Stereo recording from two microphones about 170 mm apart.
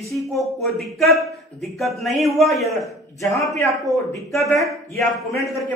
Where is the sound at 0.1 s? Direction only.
Centre (ahead or behind).